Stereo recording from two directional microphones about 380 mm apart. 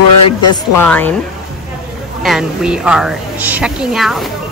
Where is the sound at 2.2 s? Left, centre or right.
Centre.